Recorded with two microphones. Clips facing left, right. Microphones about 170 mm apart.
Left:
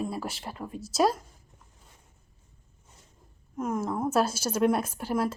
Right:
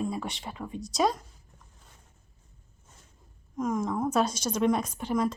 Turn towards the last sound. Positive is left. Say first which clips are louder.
# right 1 dB
turn(degrees=5)  # may be behind; listen again after turning